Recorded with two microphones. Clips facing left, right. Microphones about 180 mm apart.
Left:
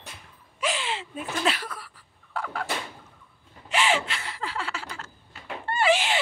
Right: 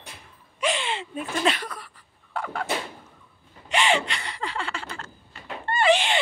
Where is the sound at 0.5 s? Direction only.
5° left (ahead or behind).